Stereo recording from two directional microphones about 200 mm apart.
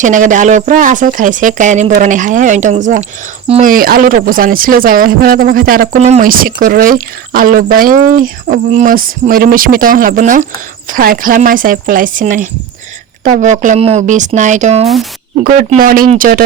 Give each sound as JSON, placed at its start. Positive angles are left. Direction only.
{"t": 0.0, "sound": "speech", "side_deg": -40}